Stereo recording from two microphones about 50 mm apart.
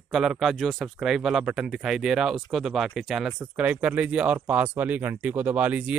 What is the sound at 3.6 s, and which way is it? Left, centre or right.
Speech, right.